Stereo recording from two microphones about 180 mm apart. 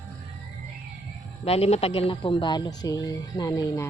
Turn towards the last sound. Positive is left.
turn(degrees=20)  # may be behind; listen again after turning